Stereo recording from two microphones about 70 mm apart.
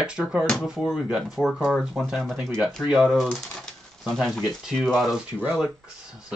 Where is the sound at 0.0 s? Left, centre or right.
Centre.